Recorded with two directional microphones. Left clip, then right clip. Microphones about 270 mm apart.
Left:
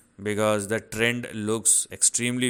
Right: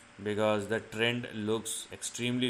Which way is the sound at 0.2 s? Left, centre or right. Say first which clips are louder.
Left 5 dB; left.